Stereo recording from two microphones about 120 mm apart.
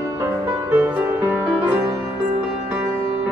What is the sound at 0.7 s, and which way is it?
Music, 15° right (ahead or behind).